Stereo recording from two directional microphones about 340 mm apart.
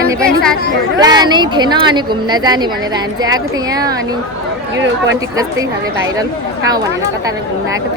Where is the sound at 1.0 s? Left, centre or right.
Centre.